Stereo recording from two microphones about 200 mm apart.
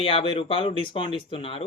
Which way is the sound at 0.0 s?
30° left (ahead or behind).